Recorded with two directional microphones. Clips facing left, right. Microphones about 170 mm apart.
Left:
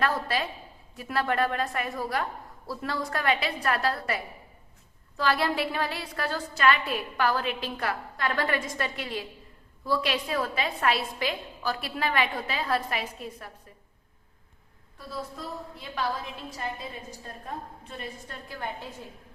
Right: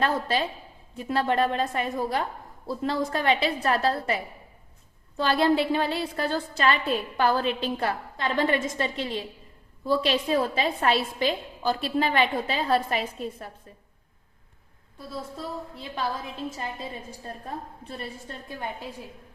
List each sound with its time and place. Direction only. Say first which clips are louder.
0.0 s a woman's voice: right 3 dB; 25° right (ahead or behind)
15.4 s a woman's voice: right 3 dB; 30° right (ahead or behind)
17.1 s a woman's voice: right 2 dB; 35° right (ahead or behind)